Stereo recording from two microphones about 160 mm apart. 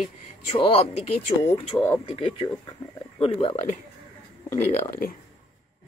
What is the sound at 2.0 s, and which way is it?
Speech, 35° left (ahead or behind).